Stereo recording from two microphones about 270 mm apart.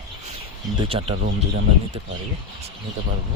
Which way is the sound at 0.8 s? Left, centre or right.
Right.